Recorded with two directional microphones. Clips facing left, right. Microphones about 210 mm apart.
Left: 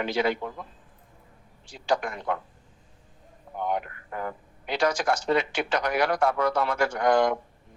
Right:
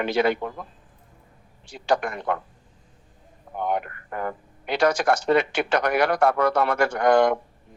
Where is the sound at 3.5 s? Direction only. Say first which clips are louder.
Right 3 dB; 60° right (ahead or behind).